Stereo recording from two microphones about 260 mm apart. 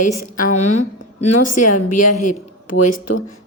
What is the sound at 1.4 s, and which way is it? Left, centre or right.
Speech, left.